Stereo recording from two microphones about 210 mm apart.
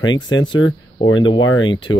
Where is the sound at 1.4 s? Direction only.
70° left (ahead or behind).